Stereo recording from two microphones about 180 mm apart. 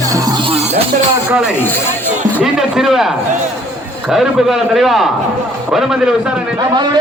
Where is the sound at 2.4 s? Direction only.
5° right (ahead or behind).